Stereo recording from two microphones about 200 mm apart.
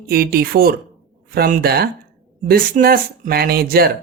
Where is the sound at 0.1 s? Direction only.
50° right (ahead or behind).